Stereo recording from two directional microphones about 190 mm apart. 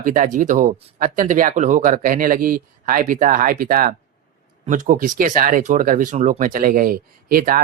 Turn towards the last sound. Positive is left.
turn(degrees=-45)  # may be behind; listen again after turning